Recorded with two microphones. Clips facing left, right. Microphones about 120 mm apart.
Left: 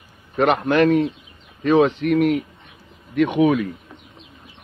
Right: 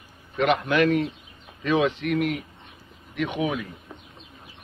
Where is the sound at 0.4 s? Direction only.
45° left (ahead or behind).